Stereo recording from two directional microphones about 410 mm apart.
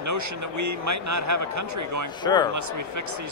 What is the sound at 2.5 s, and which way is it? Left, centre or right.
Speech, right.